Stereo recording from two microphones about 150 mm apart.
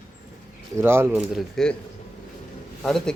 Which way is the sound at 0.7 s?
15° right (ahead or behind).